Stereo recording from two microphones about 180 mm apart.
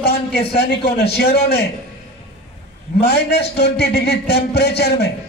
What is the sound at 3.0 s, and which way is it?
A man's voice, 65° left (ahead or behind).